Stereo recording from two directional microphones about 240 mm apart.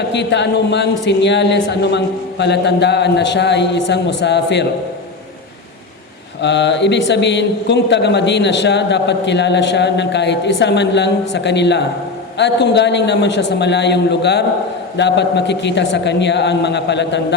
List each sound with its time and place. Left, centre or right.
0.1 s a man's voice: left
6.4 s a man's voice: left